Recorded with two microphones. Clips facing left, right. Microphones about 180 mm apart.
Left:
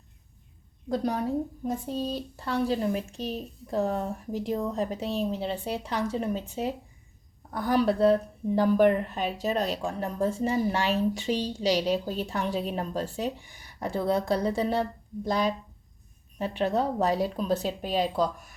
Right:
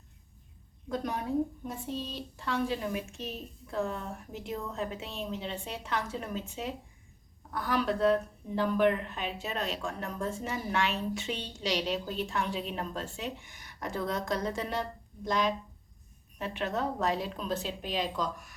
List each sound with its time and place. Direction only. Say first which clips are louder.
0.9 s a woman's voice: left 5 dB; 35° left (ahead or behind)